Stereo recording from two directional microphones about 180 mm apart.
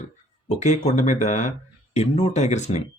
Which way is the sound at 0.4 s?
40° left (ahead or behind).